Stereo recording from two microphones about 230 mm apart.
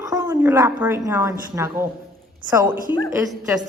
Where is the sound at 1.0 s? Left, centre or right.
Centre.